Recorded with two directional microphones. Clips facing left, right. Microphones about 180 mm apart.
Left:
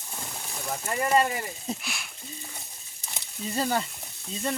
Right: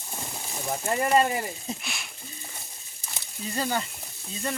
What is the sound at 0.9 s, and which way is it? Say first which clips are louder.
Speech: right 1 dB; 25° right (ahead or behind).